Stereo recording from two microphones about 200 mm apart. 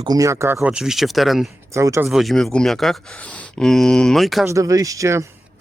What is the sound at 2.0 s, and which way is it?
Speech, centre (ahead or behind).